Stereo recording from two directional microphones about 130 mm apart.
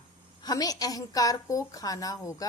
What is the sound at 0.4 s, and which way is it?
A woman's voice, 30° left (ahead or behind).